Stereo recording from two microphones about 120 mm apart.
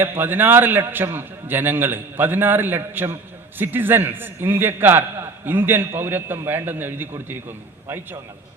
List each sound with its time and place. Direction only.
0.0 s a man's voice: 20° right (ahead or behind)